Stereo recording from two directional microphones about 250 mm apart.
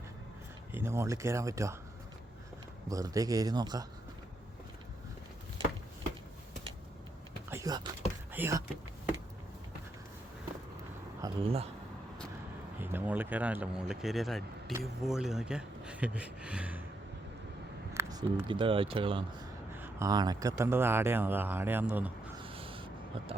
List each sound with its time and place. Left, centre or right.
0.7 s speech: centre
2.9 s speech: centre
7.5 s a sound: centre
8.3 s speech: centre
11.2 s speech: right
12.8 s speech: centre
17.9 s a sound: centre
18.3 s speech: right
19.7 s speech: centre
22.4 s a sound: right